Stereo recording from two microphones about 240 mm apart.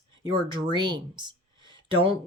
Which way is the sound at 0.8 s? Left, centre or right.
Centre.